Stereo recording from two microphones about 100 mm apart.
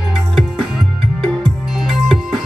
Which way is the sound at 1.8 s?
Centre (ahead or behind).